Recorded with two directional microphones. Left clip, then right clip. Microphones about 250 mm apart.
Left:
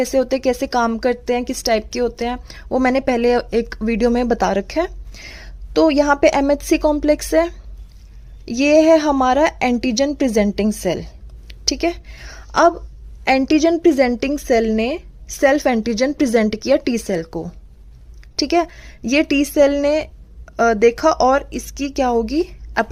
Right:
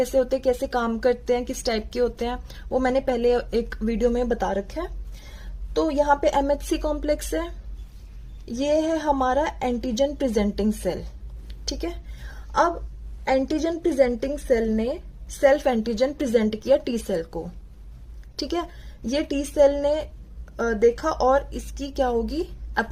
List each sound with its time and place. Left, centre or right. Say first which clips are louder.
0.0 s a woman's voice: left 4 dB; left
11.4 s a sound: left 11 dB; left
13.3 s a woman's voice: left 8 dB; left